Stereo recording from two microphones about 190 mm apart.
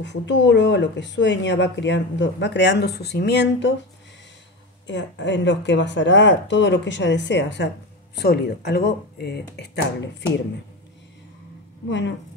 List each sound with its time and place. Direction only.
0.0 s speech: 70° left (ahead or behind)
4.8 s speech: 70° left (ahead or behind)
8.2 s speech: 60° left (ahead or behind)